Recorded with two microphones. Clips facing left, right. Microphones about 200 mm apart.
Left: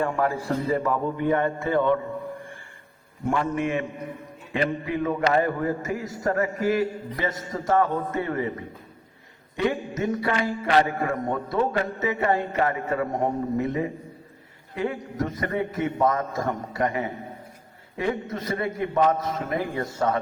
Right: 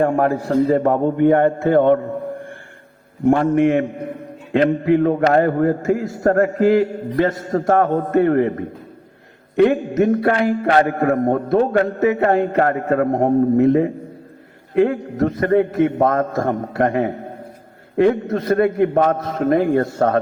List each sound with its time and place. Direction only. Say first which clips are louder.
0.0 s a man's voice: right 8 dB; 60° right (ahead or behind)
3.2 s a man's voice: right 11 dB; 60° right (ahead or behind)
19.5 s a man's voice: right 11 dB; 70° right (ahead or behind)